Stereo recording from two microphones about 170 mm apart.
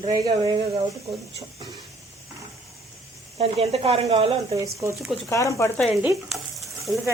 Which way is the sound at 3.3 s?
35° right (ahead or behind).